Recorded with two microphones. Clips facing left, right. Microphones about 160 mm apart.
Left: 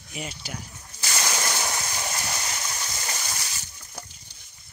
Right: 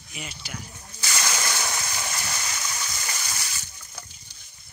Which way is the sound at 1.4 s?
15° left (ahead or behind).